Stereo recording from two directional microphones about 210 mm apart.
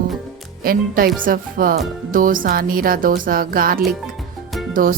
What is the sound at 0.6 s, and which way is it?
Music, 45° right (ahead or behind).